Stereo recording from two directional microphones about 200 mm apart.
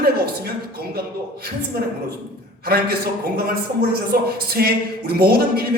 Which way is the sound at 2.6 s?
50° right (ahead or behind).